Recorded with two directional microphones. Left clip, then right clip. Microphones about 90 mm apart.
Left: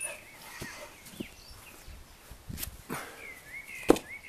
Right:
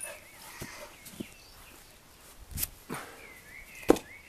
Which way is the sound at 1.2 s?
55° right (ahead or behind).